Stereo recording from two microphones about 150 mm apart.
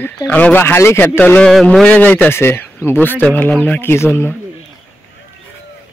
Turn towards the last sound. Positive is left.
turn(degrees=15)  # may be behind; listen again after turning